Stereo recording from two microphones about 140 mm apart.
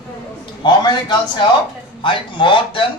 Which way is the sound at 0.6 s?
30° left (ahead or behind).